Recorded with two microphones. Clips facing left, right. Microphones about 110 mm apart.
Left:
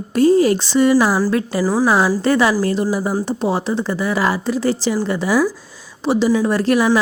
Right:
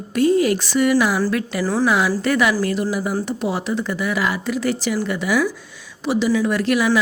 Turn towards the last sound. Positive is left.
turn(degrees=35)  # may be behind; listen again after turning